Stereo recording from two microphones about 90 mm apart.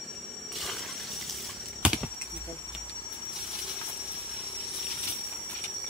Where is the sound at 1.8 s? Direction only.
5° right (ahead or behind).